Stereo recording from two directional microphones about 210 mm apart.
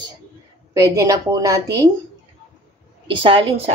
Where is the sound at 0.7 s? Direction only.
15° right (ahead or behind).